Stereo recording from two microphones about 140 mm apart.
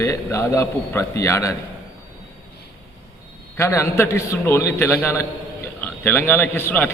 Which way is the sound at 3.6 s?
20° left (ahead or behind).